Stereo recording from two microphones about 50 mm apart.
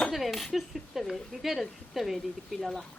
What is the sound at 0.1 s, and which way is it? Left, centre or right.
A man's voice, centre.